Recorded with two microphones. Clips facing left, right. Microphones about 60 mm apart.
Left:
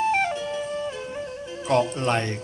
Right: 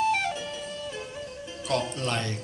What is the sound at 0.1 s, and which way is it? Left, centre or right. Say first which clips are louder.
Music: left 4 dB; left.